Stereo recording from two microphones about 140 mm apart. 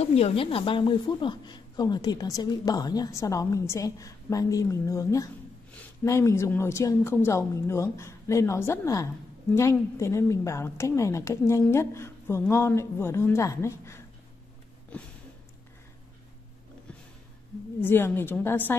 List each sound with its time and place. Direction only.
0.0 s a woman's voice: 45° left (ahead or behind); by 14.0 s 20° left (ahead or behind)
17.8 s a woman's voice: 15° left (ahead or behind)